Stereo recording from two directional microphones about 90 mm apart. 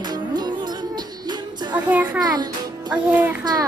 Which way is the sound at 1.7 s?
15° right (ahead or behind).